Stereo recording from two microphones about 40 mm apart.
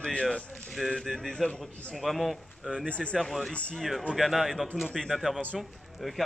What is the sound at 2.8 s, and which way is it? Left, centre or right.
Speech, left.